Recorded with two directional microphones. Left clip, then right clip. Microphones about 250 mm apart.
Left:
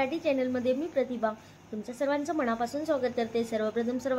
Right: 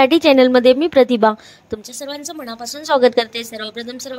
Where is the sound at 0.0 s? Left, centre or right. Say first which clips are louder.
Right 17 dB; right.